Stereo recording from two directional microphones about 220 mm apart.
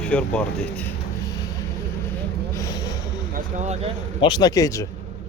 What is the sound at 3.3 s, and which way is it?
Speech, 30° right (ahead or behind).